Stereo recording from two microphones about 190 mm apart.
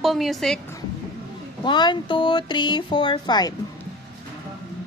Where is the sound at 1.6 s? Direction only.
25° left (ahead or behind).